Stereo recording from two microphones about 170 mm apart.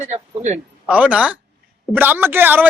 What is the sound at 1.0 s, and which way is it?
Speech, 10° right (ahead or behind).